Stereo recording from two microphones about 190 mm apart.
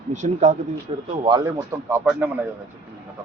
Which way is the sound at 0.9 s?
25° right (ahead or behind).